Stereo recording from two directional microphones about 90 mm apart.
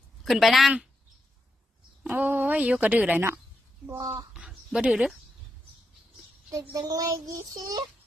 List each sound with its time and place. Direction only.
0.3 s speech: centre (ahead or behind)
2.0 s speech: 20° right (ahead or behind)
4.4 s a sound: 10° right (ahead or behind)
6.5 s child singing: 40° right (ahead or behind)